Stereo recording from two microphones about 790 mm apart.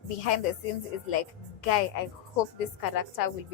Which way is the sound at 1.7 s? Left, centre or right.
Left.